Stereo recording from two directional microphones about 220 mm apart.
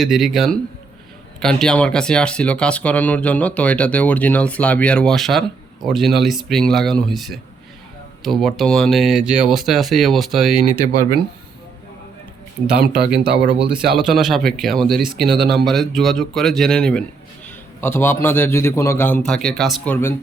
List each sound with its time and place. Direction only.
0.0 s speech: centre (ahead or behind)
12.6 s speech: 45° right (ahead or behind)
12.9 s speech: 5° right (ahead or behind)
13.5 s speech: 20° right (ahead or behind)
13.9 s a man's voice: centre (ahead or behind)